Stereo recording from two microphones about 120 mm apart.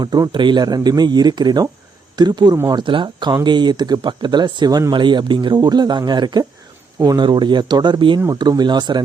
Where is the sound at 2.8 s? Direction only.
40° right (ahead or behind).